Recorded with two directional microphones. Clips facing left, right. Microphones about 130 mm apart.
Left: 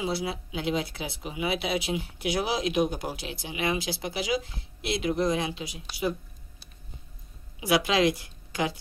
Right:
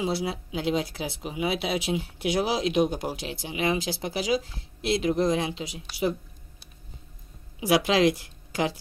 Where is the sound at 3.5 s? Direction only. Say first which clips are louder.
Right 2 dB; 35° right (ahead or behind).